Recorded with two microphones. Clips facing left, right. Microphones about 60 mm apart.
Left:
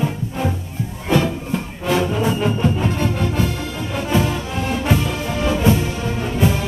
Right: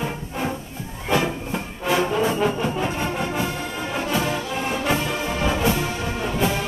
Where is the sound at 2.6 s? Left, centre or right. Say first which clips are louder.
Left 4 dB; centre.